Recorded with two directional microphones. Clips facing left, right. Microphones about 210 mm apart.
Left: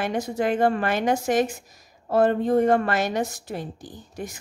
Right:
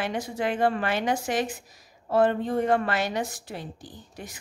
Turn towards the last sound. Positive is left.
turn(degrees=45)  # may be behind; listen again after turning